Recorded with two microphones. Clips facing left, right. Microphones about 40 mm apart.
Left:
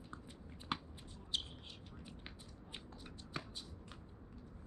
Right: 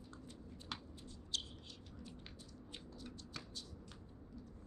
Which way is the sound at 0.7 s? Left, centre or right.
Left.